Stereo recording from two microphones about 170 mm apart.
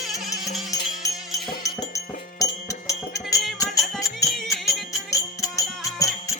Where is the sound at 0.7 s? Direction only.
20° left (ahead or behind).